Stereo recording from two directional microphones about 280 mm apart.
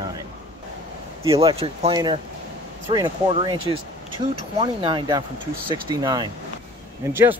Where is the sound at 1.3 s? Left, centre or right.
Centre.